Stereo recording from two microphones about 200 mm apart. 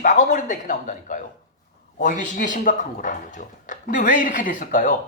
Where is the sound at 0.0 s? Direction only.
40° left (ahead or behind).